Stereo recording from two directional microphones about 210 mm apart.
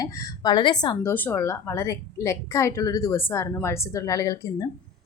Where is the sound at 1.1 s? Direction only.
10° left (ahead or behind).